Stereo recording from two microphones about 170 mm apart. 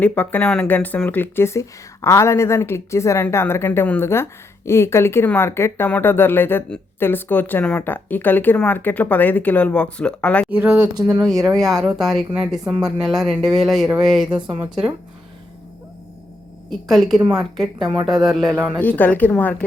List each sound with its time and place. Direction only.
0.0 s speech: 10° left (ahead or behind)
10.5 s speech: 10° right (ahead or behind)
10.9 s speech: 20° right (ahead or behind)
11.4 s speech: centre (ahead or behind)
16.6 s speech: centre (ahead or behind)
18.8 s speech: 10° left (ahead or behind)